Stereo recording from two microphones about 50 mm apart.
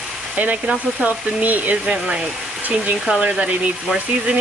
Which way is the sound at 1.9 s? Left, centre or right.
Centre.